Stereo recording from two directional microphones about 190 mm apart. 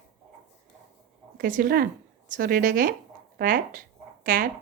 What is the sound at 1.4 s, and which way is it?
A woman's voice, 45° right (ahead or behind).